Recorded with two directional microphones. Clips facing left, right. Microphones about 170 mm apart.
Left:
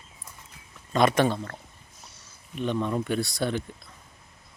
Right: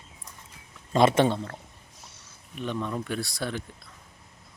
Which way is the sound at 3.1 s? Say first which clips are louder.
Left 4 dB; centre (ahead or behind).